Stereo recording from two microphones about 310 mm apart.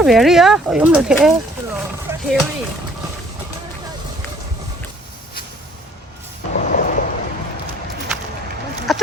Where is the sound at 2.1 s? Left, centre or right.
Centre.